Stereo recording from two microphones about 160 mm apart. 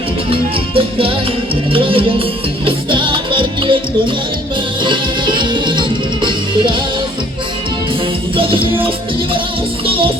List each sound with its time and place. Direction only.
0.3 s music: 35° right (ahead or behind)
8.4 s music: 35° right (ahead or behind)